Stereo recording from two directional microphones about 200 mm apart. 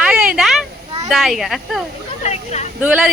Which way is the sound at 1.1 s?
Centre (ahead or behind).